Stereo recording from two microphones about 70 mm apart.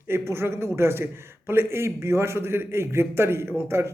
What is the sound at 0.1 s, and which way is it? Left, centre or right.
A man's voice, right.